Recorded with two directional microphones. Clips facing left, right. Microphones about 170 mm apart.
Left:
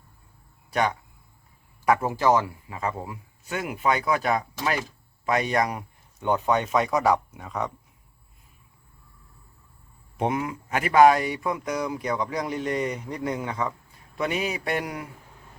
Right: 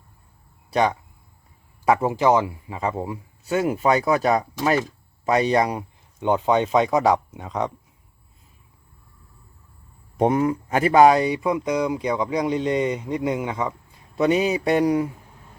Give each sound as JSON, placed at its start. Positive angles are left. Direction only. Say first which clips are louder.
{"t": 1.8, "sound": "speech", "louder": "right 3 dB", "side_deg": -20}
{"t": 10.2, "sound": "speech", "louder": "right 7 dB", "side_deg": -35}
{"t": 14.2, "sound": "speech", "louder": "right 8 dB", "side_deg": -30}